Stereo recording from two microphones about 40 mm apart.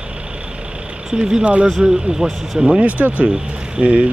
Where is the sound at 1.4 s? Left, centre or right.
Right.